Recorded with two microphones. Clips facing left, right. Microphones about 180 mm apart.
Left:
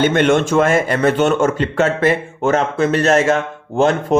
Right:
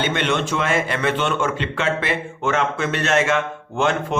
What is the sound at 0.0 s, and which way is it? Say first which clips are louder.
A man's voice: left 8 dB; 45° left (ahead or behind).